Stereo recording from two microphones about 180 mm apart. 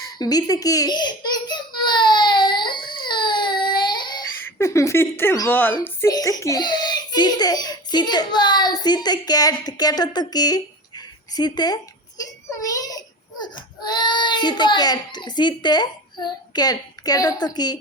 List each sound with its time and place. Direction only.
0.2 s a sound: 20° left (ahead or behind)
4.4 s a child's voice: 15° left (ahead or behind)
12.5 s child singing: 20° left (ahead or behind)
13.4 s a child's voice: 25° left (ahead or behind)